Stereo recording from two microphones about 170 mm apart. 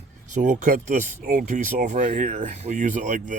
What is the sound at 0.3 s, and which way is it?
Speech, 45° right (ahead or behind).